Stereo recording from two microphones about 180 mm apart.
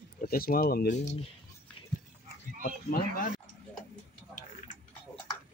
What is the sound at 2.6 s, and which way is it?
Speech, 55° left (ahead or behind).